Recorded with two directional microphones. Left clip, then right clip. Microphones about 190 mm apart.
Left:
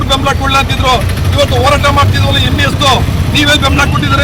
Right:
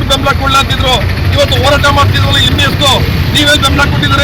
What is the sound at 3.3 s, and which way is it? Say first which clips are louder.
Speech: right 1 dB; 20° left (ahead or behind).